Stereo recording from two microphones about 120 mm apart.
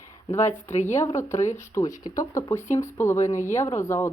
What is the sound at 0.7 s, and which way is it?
Speech, 75° left (ahead or behind).